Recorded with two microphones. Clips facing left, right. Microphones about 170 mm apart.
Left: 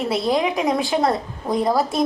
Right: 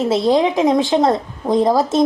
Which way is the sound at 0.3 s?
25° right (ahead or behind).